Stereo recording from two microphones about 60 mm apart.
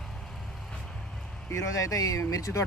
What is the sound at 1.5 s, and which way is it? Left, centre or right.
Speech, left.